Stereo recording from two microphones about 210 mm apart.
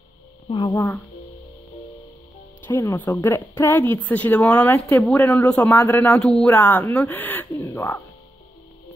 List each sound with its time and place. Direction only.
0.5 s a woman's voice: 20° left (ahead or behind)
2.6 s a woman's voice: 10° left (ahead or behind)